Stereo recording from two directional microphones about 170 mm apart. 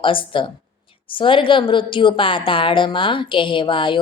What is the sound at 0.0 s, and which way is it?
A woman's voice, 30° left (ahead or behind).